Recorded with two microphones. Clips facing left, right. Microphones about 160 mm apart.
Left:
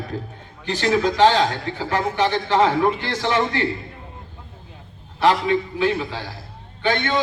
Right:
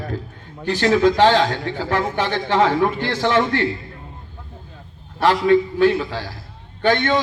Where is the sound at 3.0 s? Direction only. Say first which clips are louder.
Right 3 dB; 45° right (ahead or behind).